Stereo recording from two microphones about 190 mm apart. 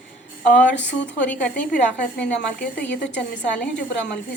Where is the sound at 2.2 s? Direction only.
70° left (ahead or behind).